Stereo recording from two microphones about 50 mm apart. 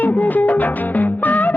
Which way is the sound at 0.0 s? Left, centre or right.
Left.